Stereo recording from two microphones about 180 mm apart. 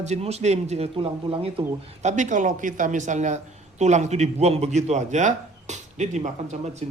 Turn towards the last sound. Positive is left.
turn(degrees=-40)  # may be behind; listen again after turning